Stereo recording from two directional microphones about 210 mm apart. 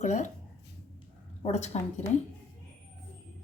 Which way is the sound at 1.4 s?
30° left (ahead or behind).